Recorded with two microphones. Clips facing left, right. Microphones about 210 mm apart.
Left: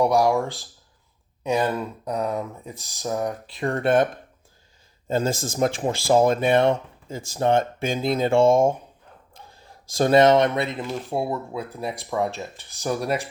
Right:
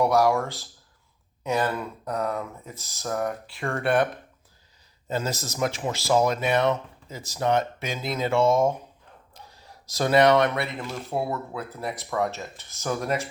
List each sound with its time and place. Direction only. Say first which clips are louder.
0.0 s speech: left 2 dB; 15° left (ahead or behind)
10.0 s speech: left 3 dB; 25° left (ahead or behind)